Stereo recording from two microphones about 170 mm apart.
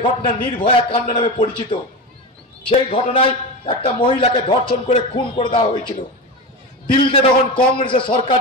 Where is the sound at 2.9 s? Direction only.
35° left (ahead or behind).